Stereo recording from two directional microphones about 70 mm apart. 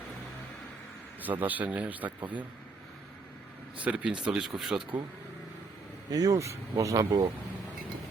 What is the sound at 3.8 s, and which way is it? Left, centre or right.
Speech, centre.